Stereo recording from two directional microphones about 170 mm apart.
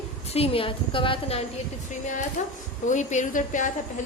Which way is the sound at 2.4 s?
50° left (ahead or behind).